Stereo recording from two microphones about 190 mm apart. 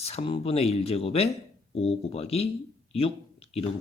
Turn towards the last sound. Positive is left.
turn(degrees=30)  # may be behind; listen again after turning